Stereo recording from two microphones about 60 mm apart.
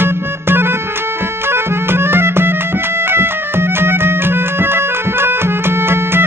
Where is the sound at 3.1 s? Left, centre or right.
Right.